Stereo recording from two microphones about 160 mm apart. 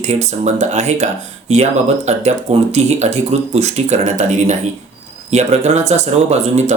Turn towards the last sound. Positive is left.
turn(degrees=-45)  # may be behind; listen again after turning